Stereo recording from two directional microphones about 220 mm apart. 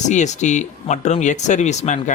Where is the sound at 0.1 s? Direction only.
35° left (ahead or behind).